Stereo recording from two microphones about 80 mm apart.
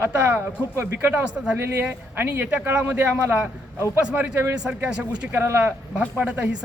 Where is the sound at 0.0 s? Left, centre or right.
Right.